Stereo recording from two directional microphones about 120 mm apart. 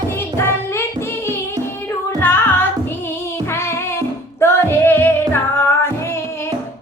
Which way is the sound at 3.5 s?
20° left (ahead or behind).